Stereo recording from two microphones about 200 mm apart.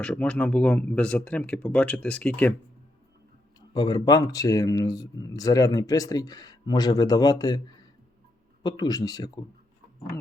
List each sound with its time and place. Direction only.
0.0 s speech: 5° left (ahead or behind)
3.8 s speech: 20° left (ahead or behind)
8.6 s speech: 20° left (ahead or behind)